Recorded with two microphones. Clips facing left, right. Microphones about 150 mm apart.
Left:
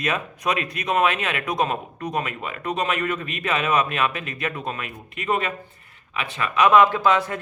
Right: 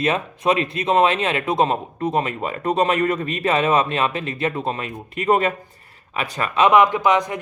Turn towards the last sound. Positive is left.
turn(degrees=-15)  # may be behind; listen again after turning